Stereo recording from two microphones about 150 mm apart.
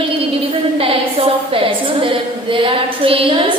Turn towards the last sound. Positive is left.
turn(degrees=-35)  # may be behind; listen again after turning